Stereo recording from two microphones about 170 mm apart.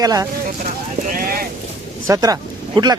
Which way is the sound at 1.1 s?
55° right (ahead or behind).